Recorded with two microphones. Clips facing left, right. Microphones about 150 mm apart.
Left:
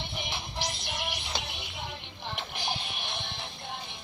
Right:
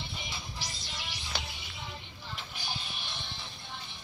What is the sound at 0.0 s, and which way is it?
Music, 65° left (ahead or behind).